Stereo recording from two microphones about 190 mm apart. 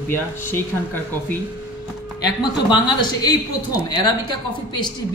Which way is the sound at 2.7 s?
20° left (ahead or behind).